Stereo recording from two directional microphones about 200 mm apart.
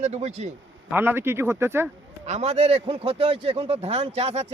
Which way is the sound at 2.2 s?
35° right (ahead or behind).